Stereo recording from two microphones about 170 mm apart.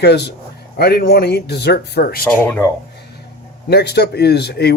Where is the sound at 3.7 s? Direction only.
75° left (ahead or behind).